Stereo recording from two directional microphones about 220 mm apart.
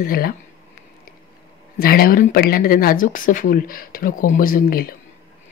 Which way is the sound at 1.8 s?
40° left (ahead or behind).